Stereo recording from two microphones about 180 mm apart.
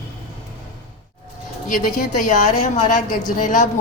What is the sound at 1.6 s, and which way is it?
A woman's voice, 45° left (ahead or behind).